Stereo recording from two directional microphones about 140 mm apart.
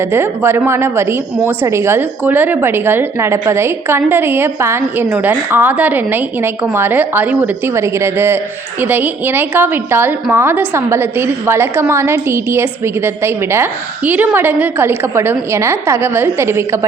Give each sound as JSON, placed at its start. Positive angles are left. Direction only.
{"t": 0.0, "sound": "a woman's voice", "side_deg": -15}